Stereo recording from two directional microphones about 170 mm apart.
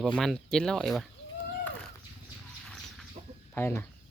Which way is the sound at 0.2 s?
5° left (ahead or behind).